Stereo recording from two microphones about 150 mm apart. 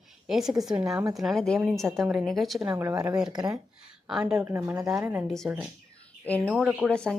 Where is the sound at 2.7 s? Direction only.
20° right (ahead or behind).